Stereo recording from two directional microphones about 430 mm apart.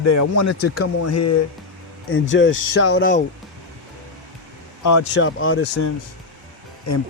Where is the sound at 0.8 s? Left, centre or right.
Left.